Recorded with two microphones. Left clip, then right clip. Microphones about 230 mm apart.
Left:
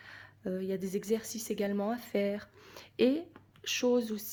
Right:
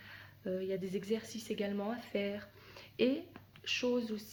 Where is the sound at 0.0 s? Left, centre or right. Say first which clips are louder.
Left 3 dB; left.